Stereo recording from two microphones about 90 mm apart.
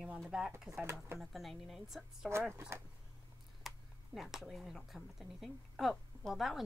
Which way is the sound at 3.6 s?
Centre (ahead or behind).